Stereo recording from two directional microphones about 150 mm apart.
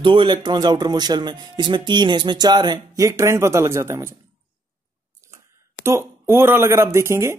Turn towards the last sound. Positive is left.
turn(degrees=-20)  # may be behind; listen again after turning